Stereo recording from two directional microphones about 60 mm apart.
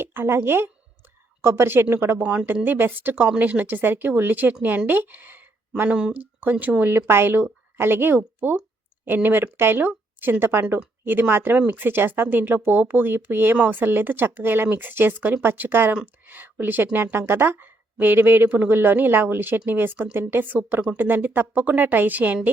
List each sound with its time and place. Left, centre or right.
0.0 s speech: right
2.2 s speech: centre
2.6 s speech: right
5.9 s speech: centre
6.1 s speech: right